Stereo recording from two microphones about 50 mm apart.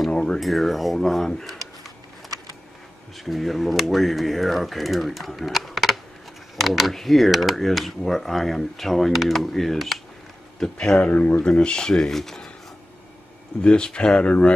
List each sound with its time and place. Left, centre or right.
0.1 s speech: centre
0.4 s speech: centre
10.6 s speech: centre
11.4 s speech: centre
13.6 s speech: centre